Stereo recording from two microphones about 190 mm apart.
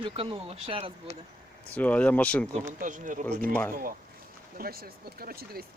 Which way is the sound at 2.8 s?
45° right (ahead or behind).